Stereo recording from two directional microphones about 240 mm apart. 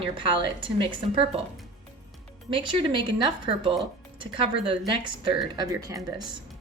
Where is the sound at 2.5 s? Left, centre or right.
Right.